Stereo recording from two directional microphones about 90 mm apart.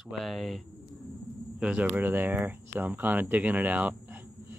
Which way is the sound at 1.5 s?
10° right (ahead or behind).